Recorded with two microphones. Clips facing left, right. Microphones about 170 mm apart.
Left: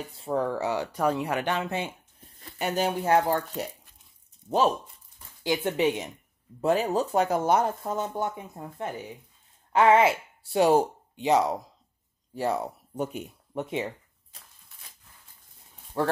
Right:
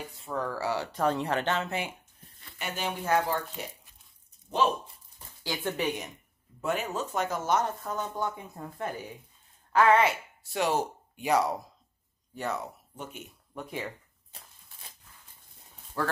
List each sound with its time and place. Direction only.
0.2 s speech: 30° left (ahead or behind)
2.4 s a sound: 40° left (ahead or behind)
4.5 s speech: 40° left (ahead or behind)
5.4 s speech: 20° left (ahead or behind)
6.6 s speech: 35° left (ahead or behind)
12.4 s speech: 35° left (ahead or behind)
13.6 s speech: 25° left (ahead or behind)
16.0 s speech: 25° left (ahead or behind)